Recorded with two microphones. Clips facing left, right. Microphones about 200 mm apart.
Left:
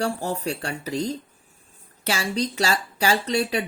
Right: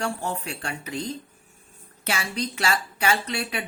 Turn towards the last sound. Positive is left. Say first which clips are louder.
# left 6 dB
turn(degrees=35)  # may be behind; listen again after turning